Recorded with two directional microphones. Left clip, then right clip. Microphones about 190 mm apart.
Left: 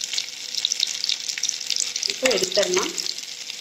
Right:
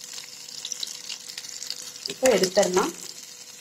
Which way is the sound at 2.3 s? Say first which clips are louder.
Right 3 dB; 20° right (ahead or behind).